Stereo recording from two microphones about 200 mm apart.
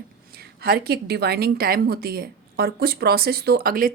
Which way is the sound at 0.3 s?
50° right (ahead or behind).